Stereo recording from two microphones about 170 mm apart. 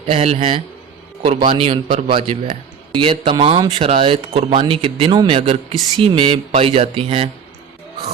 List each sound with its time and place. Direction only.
0.1 s a man's voice: 35° right (ahead or behind)